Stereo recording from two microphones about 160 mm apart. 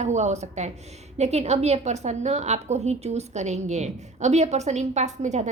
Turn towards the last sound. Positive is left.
turn(degrees=-45)  # may be behind; listen again after turning